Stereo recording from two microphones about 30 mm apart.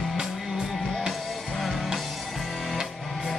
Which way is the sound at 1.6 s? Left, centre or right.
Centre.